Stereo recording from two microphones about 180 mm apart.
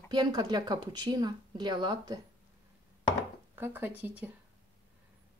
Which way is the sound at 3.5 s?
10° right (ahead or behind).